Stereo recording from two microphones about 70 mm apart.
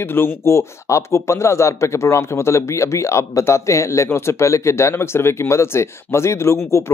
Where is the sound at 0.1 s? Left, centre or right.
Left.